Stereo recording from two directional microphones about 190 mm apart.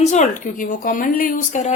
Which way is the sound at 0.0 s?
40° left (ahead or behind).